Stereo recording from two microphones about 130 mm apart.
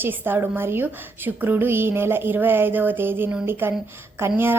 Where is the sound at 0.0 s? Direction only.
15° right (ahead or behind).